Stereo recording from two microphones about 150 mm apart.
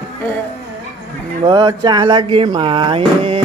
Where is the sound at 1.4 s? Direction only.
25° right (ahead or behind).